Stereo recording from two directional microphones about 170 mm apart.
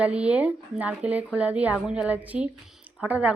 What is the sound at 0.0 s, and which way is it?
Speech, 5° right (ahead or behind).